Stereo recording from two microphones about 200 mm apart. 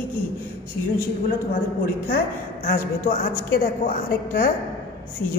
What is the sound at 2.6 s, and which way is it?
A woman's voice, 45° left (ahead or behind).